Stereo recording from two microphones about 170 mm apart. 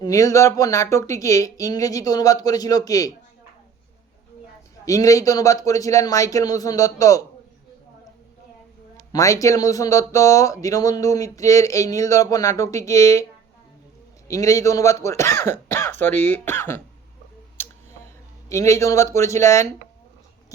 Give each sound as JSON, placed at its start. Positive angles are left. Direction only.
{"t": 0.0, "sound": "speech", "side_deg": 20}
{"t": 4.9, "sound": "speech", "side_deg": 20}
{"t": 9.1, "sound": "speech", "side_deg": 20}
{"t": 14.3, "sound": "speech", "side_deg": 20}
{"t": 18.4, "sound": "speech", "side_deg": 15}